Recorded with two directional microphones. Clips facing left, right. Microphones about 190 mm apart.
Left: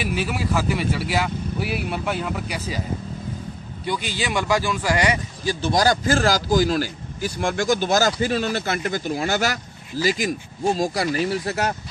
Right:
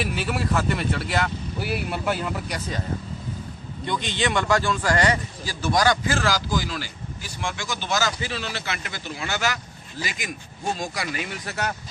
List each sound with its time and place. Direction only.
0.0 s speech: centre (ahead or behind)
3.8 s a man's voice: 5° left (ahead or behind); by 11.7 s 35° left (ahead or behind)